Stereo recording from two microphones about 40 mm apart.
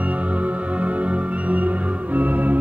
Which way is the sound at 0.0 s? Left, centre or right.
Right.